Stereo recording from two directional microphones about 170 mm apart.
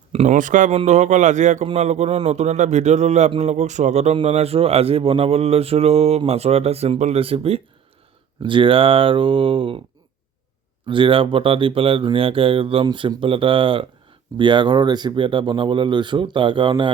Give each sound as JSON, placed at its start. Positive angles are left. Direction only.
{"t": 0.1, "sound": "a man's voice", "side_deg": -40}
{"t": 10.8, "sound": "a man's voice", "side_deg": -30}